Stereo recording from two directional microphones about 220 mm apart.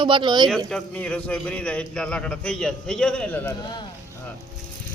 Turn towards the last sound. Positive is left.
turn(degrees=15)  # may be behind; listen again after turning